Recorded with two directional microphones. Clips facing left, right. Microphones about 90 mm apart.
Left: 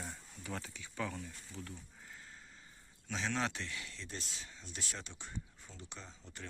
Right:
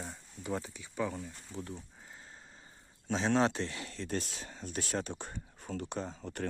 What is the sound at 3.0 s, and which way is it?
Speech, 35° right (ahead or behind).